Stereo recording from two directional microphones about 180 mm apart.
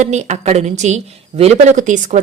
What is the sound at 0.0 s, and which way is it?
A woman's voice, 40° right (ahead or behind).